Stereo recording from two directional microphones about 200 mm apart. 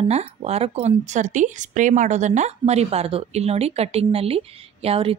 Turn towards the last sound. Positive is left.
turn(degrees=-30)  # may be behind; listen again after turning